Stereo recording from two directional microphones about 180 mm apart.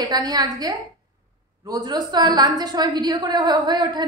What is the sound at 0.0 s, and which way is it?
A woman's voice, 20° right (ahead or behind).